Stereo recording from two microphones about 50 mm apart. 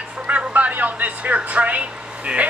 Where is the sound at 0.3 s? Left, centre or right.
Right.